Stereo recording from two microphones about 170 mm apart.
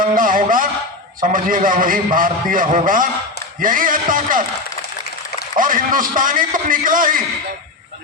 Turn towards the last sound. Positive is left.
turn(degrees=-55)  # may be behind; listen again after turning